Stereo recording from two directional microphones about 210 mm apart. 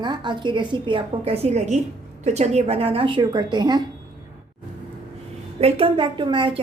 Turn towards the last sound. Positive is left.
turn(degrees=-20)  # may be behind; listen again after turning